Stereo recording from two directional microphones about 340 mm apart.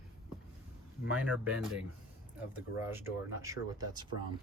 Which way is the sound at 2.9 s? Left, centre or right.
Centre.